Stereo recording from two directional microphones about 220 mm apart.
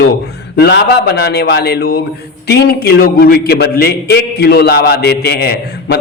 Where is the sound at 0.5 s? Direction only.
50° left (ahead or behind).